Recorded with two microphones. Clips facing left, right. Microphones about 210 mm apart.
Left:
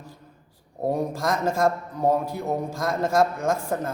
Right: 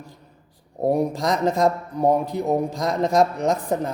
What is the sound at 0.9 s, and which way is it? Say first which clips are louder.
A man's voice: right 4 dB; 15° right (ahead or behind).